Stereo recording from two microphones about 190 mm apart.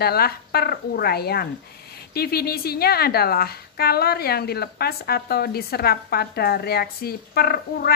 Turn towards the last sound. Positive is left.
turn(degrees=55)  # may be behind; listen again after turning